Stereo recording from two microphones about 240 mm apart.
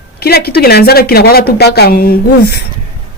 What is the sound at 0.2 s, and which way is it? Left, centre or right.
Speech, left.